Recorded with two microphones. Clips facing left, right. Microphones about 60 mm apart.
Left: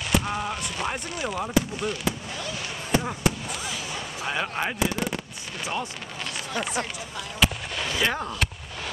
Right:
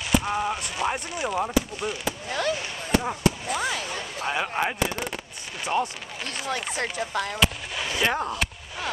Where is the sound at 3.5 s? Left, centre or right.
Right.